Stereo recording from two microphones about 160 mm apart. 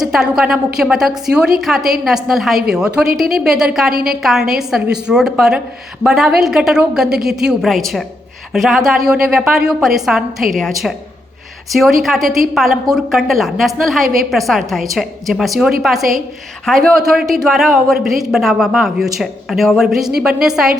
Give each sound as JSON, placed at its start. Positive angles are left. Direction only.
{"t": 0.0, "sound": "speech", "side_deg": -5}
{"t": 3.9, "sound": "a woman's voice", "side_deg": -65}
{"t": 4.2, "sound": "speech", "side_deg": 0}